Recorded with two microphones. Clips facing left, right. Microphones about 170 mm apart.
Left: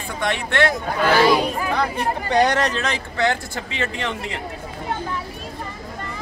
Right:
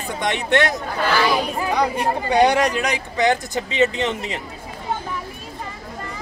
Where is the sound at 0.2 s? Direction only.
20° right (ahead or behind).